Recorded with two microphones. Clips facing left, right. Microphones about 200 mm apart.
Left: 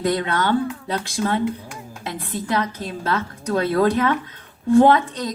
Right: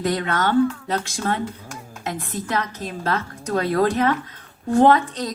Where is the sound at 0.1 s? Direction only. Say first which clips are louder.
Even; 40° right (ahead or behind).